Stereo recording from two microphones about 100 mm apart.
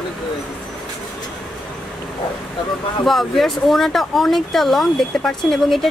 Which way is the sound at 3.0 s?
Centre (ahead or behind).